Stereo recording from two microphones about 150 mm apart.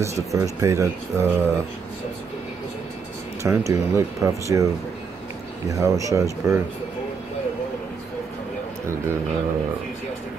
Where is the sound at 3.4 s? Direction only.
20° right (ahead or behind).